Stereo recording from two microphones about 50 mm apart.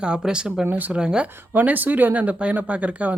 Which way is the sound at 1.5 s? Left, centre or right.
Right.